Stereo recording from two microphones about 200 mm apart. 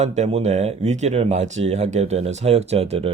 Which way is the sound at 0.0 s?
35° right (ahead or behind).